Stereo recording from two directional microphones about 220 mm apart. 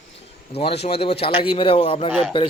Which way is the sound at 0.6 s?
25° left (ahead or behind).